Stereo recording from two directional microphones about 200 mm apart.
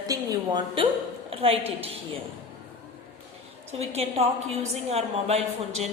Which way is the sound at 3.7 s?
30° right (ahead or behind).